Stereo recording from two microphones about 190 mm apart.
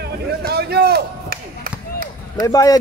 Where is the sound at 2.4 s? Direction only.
20° left (ahead or behind).